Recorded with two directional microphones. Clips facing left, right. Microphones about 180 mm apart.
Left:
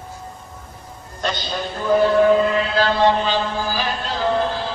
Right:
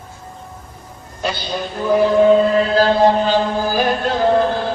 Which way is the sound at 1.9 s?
15° right (ahead or behind).